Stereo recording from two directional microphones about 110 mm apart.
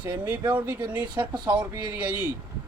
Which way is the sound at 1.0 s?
40° right (ahead or behind).